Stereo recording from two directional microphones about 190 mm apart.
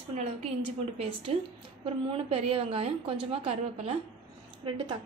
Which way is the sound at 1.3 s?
30° right (ahead or behind).